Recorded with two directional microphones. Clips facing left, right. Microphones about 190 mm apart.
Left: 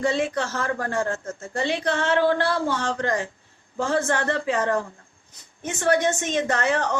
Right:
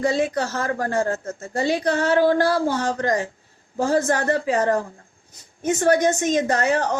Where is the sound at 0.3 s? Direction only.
40° right (ahead or behind).